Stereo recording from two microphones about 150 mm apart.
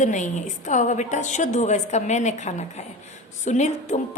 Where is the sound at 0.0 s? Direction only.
55° left (ahead or behind).